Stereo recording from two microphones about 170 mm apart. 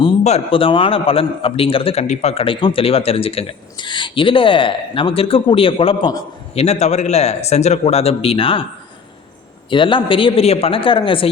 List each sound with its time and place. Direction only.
0.0 s a man's voice: 35° left (ahead or behind)
6.5 s a man's voice: 40° left (ahead or behind)
9.6 s a man's voice: 30° left (ahead or behind)